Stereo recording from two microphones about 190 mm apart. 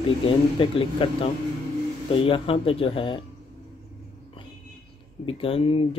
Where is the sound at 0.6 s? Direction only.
25° left (ahead or behind).